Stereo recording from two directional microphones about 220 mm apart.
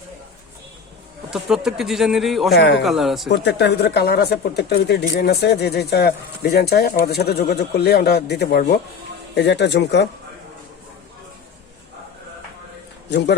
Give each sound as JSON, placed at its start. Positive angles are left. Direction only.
{"t": 1.3, "sound": "speech", "side_deg": 0}
{"t": 2.5, "sound": "speech", "side_deg": 50}
{"t": 2.8, "sound": "speech", "side_deg": 0}
{"t": 3.2, "sound": "speech", "side_deg": 50}
{"t": 13.1, "sound": "a man's voice", "side_deg": 50}